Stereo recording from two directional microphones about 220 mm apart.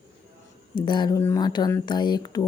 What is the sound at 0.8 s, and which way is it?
Speech, 20° left (ahead or behind).